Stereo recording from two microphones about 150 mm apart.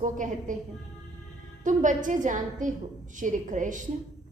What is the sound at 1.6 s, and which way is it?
A woman's voice, 55° right (ahead or behind).